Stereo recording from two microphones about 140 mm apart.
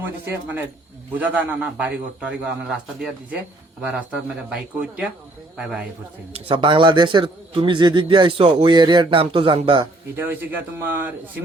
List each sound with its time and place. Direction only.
0.0 s a man's voice: 15° right (ahead or behind)
5.5 s a man's voice: 5° right (ahead or behind)
6.3 s a man's voice: 35° right (ahead or behind)
10.2 s a man's voice: 15° right (ahead or behind)